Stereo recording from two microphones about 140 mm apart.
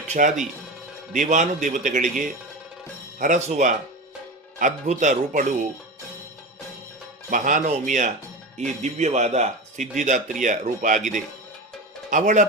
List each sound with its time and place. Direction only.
0.1 s a man's voice: 60° right (ahead or behind)
7.3 s a man's voice: 70° right (ahead or behind)